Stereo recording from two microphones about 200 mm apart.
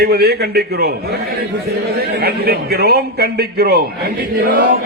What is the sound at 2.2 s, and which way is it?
A man's voice, 50° right (ahead or behind).